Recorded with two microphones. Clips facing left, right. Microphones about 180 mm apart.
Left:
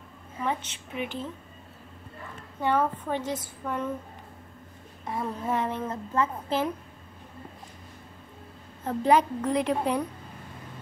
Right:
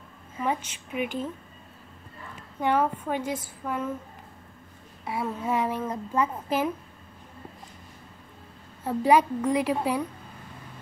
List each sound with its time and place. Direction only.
0.4 s speech: 10° right (ahead or behind)
2.6 s speech: 10° right (ahead or behind)
5.0 s speech: 10° right (ahead or behind)
8.8 s speech: 10° right (ahead or behind)